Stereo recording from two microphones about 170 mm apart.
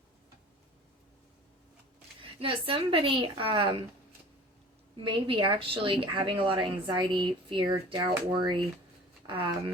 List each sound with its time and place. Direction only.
2.4 s a woman's voice: 30° right (ahead or behind)
4.9 s a woman's voice: 30° right (ahead or behind)